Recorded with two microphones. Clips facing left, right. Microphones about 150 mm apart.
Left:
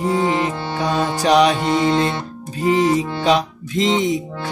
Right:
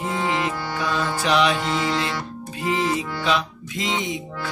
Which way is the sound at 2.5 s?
40° left (ahead or behind).